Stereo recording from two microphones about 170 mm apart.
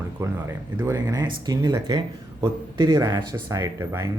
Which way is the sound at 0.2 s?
20° right (ahead or behind).